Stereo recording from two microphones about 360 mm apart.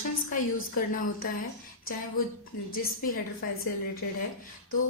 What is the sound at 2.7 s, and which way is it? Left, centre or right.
A woman's voice, left.